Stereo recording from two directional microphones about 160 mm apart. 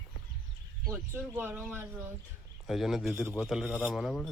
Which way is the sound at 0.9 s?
15° right (ahead or behind).